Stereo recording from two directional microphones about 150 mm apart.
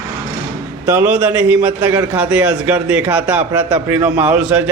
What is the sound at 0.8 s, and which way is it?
Speech, 15° right (ahead or behind).